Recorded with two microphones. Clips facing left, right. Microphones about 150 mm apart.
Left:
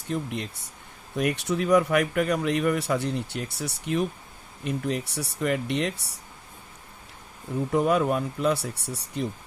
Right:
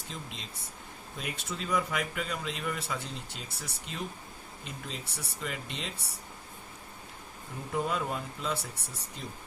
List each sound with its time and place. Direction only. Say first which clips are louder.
0.1 s speech: left 14 dB; 60° left (ahead or behind)
7.7 s speech: left 9 dB; 70° left (ahead or behind)